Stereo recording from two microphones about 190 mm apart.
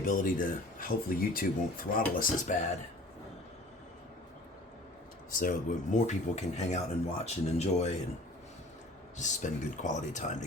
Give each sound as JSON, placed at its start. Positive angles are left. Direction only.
{"t": 0.0, "sound": "speech", "side_deg": 45}
{"t": 5.3, "sound": "speech", "side_deg": 45}
{"t": 9.1, "sound": "speech", "side_deg": 40}